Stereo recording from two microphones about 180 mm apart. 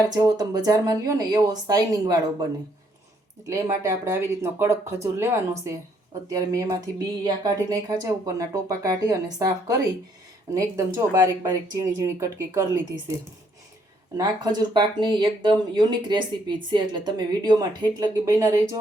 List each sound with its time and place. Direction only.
0.2 s speech: 20° right (ahead or behind)
14.2 s speech: 25° right (ahead or behind)